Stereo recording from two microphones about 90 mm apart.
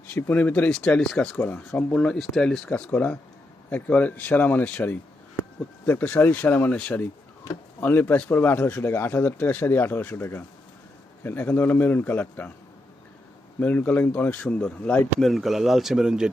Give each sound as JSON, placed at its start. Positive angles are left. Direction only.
{"t": 0.1, "sound": "speech", "side_deg": 20}
{"t": 13.6, "sound": "speech", "side_deg": 20}
{"t": 15.3, "sound": "speech", "side_deg": 0}